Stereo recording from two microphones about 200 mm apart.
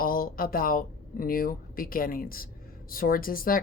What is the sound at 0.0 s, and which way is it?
Speech, 45° left (ahead or behind).